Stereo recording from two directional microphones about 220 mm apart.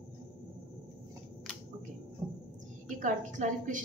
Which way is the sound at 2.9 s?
35° right (ahead or behind).